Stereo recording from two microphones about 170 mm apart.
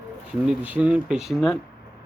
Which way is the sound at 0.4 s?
5° right (ahead or behind).